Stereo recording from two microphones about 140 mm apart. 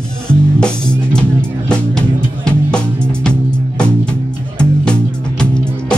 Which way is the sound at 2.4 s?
5° left (ahead or behind).